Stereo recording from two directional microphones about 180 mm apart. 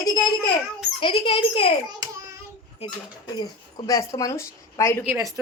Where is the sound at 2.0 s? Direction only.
20° right (ahead or behind).